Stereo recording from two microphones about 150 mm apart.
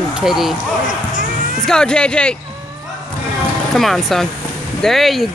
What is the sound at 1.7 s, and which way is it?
Speech, 5° left (ahead or behind).